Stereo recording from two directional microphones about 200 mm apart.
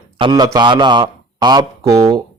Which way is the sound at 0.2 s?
20° right (ahead or behind).